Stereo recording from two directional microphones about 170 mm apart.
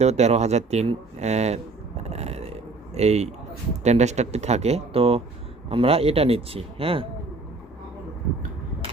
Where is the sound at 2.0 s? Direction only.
40° right (ahead or behind).